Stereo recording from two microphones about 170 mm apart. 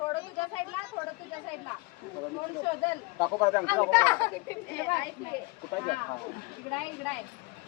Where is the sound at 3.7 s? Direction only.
10° left (ahead or behind).